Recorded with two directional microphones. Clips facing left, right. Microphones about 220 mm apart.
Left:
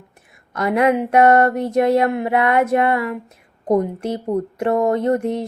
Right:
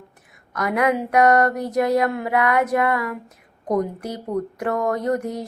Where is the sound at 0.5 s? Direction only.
25° left (ahead or behind).